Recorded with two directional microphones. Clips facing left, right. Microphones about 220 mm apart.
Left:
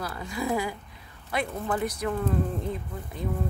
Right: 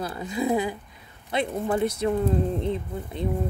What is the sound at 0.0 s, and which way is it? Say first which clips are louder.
Speech: right 4 dB; 20° right (ahead or behind).